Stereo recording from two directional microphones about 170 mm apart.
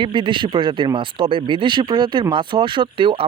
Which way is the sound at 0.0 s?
30° right (ahead or behind).